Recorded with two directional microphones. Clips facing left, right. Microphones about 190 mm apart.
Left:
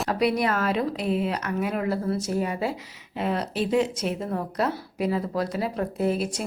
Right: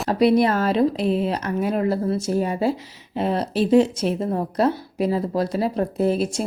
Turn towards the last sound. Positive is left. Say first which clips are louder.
# right 4 dB
turn(degrees=-30)  # may be behind; listen again after turning